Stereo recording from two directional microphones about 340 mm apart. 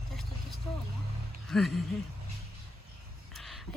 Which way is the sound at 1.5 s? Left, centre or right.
Centre.